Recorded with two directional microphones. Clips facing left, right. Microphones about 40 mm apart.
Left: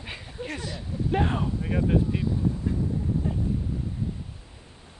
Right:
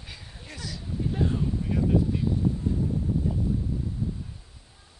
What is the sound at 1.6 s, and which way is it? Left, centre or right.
Speech, left.